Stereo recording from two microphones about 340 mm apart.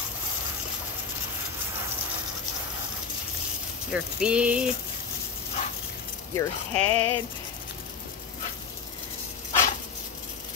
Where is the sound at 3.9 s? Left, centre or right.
Centre.